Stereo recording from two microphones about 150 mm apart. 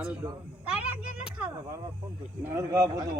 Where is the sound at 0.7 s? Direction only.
10° right (ahead or behind).